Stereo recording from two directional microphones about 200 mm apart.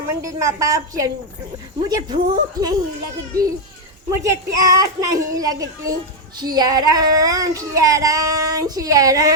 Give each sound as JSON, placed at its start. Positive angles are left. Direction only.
{"t": 0.1, "sound": "speech", "side_deg": -15}
{"t": 4.1, "sound": "speech", "side_deg": -15}